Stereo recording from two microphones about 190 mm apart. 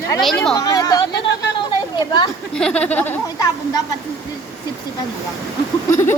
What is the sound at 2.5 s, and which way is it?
Speech, 5° left (ahead or behind).